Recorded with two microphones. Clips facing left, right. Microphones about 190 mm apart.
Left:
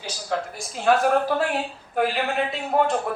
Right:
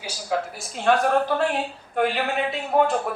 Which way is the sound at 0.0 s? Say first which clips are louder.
Right 1 dB; centre (ahead or behind).